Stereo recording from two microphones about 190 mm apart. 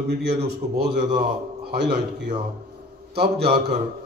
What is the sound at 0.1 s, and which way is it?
A man's voice, 60° right (ahead or behind).